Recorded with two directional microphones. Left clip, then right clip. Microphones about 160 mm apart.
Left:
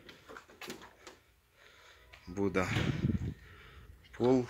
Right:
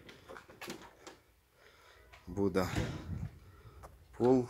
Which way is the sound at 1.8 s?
20° right (ahead or behind).